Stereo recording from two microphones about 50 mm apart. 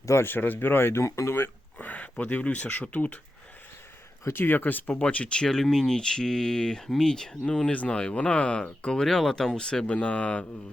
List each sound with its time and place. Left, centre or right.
0.3 s speech: left
1.0 s speech: left
1.8 s speech: left
4.3 s speech: left
5.0 s speech: left
7.7 s speech: left
9.0 s speech: centre